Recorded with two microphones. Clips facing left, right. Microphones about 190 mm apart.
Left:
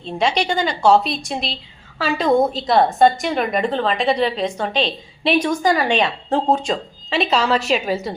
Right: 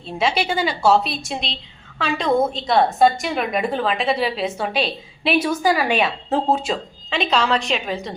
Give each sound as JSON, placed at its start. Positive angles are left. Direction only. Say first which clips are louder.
{"t": 0.0, "sound": "a woman's voice", "louder": "left 2 dB", "side_deg": -5}